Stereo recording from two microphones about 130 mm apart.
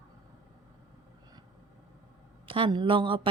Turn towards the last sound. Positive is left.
turn(degrees=-40)  # may be behind; listen again after turning